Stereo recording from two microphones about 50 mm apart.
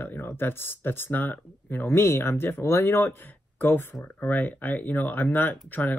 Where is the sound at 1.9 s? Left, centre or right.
Left.